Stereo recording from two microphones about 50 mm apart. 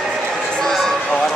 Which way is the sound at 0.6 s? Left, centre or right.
Centre.